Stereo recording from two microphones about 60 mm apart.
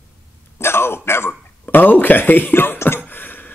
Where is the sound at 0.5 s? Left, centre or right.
Left.